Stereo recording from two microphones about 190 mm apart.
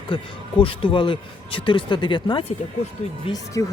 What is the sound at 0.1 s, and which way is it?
Speech, 25° left (ahead or behind).